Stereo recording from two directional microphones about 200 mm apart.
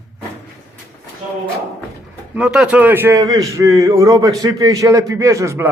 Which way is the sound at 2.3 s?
5° right (ahead or behind).